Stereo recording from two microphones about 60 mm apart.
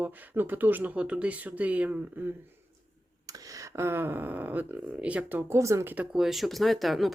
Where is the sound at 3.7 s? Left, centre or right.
Right.